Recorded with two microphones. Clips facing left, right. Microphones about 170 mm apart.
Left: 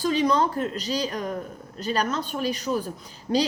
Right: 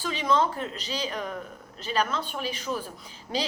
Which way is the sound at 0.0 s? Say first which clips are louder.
Left 4 dB; 40° left (ahead or behind).